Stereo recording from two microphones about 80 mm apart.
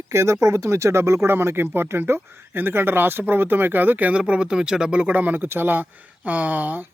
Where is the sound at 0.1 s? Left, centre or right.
Right.